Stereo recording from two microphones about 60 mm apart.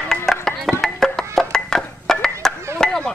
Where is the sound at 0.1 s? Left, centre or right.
Centre.